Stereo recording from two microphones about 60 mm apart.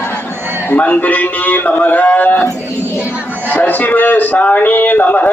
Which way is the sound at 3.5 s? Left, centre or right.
Left.